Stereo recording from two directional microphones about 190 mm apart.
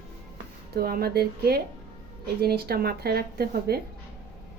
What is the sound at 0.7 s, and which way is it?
A woman's voice, 55° right (ahead or behind).